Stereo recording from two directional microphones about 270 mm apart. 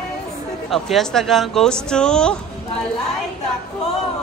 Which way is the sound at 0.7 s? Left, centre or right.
Centre.